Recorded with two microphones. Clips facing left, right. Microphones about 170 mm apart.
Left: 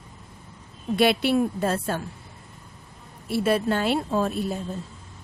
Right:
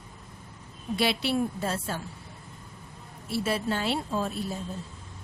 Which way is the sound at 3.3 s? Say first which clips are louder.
Left 6 dB; 55° left (ahead or behind).